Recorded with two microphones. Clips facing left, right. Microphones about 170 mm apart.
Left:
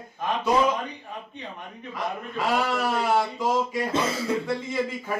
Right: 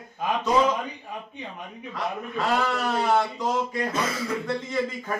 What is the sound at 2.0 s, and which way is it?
A man's voice, 10° left (ahead or behind).